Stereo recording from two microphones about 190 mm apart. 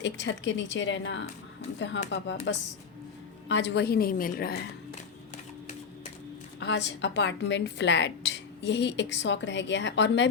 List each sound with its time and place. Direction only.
0.0 s a woman's voice: 75° left (ahead or behind); by 4.5 s 50° left (ahead or behind)
6.6 s a woman's voice: 70° left (ahead or behind)